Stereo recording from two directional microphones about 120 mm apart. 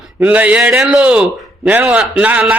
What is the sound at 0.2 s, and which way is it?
A man's voice, 10° right (ahead or behind).